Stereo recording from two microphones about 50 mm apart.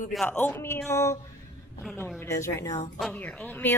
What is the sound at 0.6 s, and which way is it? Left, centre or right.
Speech, left.